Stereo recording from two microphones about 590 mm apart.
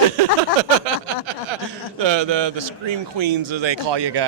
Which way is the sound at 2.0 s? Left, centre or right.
Right.